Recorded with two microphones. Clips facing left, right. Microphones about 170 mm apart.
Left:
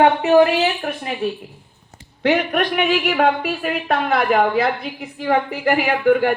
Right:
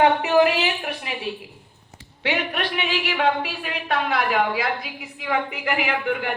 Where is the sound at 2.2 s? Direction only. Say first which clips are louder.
Left 7 dB; 45° left (ahead or behind).